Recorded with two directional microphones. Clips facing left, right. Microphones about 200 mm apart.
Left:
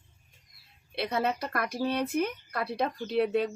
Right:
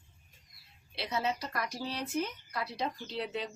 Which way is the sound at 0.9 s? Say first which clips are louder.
Left 5 dB; 55° left (ahead or behind).